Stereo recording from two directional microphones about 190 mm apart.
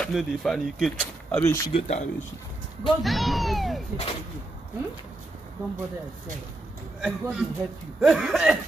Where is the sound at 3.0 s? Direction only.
Centre (ahead or behind).